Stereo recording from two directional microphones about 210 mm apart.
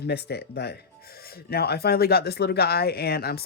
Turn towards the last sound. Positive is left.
turn(degrees=50)  # may be behind; listen again after turning